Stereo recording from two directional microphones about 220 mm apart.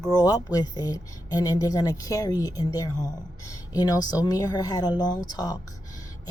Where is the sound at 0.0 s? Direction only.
15° left (ahead or behind).